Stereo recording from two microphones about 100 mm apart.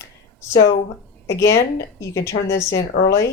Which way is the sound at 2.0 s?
30° left (ahead or behind).